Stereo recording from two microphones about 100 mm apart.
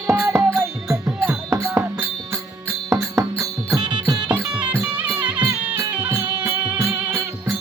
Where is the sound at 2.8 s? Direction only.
30° right (ahead or behind).